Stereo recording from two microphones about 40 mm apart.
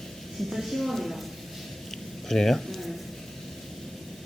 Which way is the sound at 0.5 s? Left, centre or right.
Centre.